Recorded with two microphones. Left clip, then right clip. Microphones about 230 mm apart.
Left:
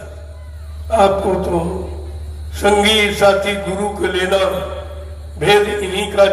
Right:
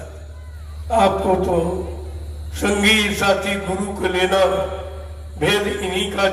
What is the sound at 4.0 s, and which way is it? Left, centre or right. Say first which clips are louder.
Speech: right 1 dB; centre.